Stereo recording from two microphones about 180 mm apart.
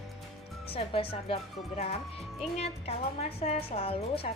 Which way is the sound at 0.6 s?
30° left (ahead or behind).